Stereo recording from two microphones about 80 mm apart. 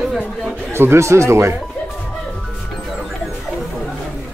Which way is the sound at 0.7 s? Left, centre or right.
Right.